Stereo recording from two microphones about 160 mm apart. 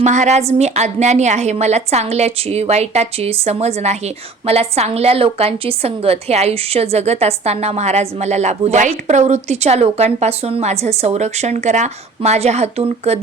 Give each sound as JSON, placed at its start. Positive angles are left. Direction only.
{"t": 0.0, "sound": "a woman's voice", "side_deg": -45}